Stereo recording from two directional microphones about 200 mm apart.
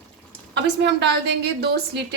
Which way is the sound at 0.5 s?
60° right (ahead or behind).